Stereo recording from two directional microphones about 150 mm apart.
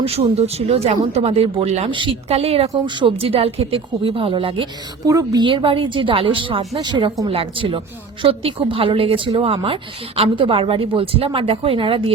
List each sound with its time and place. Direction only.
0.0 s speech: 45° right (ahead or behind)
5.0 s speech: 25° right (ahead or behind)